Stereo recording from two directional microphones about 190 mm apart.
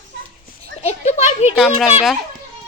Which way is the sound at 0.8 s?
35° left (ahead or behind).